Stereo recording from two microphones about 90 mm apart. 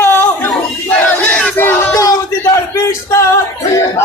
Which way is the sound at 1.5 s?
25° left (ahead or behind).